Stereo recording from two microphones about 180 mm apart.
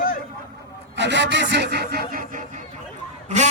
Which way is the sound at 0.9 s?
75° right (ahead or behind).